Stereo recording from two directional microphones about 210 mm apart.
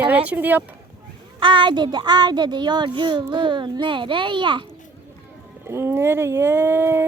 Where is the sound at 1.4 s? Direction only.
20° right (ahead or behind).